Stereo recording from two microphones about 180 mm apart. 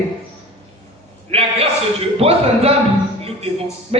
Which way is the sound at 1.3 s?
35° right (ahead or behind).